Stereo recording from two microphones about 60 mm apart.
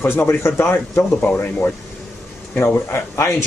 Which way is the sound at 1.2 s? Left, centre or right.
Left.